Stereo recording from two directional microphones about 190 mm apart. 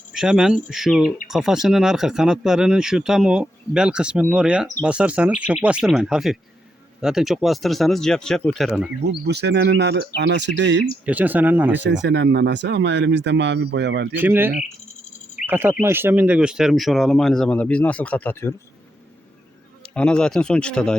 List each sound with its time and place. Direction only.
0.1 s speech: 5° right (ahead or behind)
9.0 s speech: 60° right (ahead or behind)
11.0 s speech: 10° right (ahead or behind)
11.8 s speech: 70° right (ahead or behind)
14.2 s speech: 10° right (ahead or behind); by 18.5 s 10° left (ahead or behind)
19.9 s speech: 5° left (ahead or behind)